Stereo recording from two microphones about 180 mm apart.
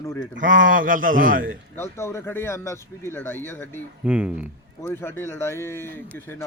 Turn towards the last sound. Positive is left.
turn(degrees=15)  # may be behind; listen again after turning